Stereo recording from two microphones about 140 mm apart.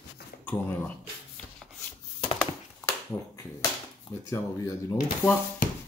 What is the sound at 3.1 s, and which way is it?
Speech, 15° left (ahead or behind).